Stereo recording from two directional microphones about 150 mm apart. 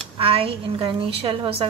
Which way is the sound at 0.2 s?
40° right (ahead or behind).